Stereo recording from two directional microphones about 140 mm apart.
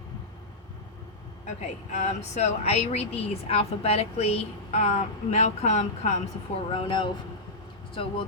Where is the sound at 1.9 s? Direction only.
55° left (ahead or behind).